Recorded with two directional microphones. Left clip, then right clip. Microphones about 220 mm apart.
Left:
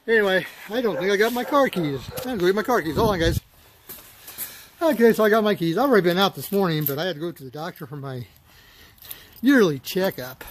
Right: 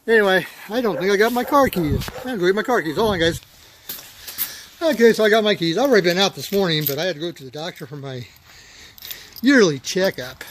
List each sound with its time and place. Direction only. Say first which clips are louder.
0.0 s speech: right 4 dB; 35° right (ahead or behind); by 1.8 s 20° right (ahead or behind)
2.2 s speech: right 2 dB; centre (ahead or behind)
4.7 s speech: right 3 dB; 10° left (ahead or behind)
9.4 s speech: right 3 dB; centre (ahead or behind)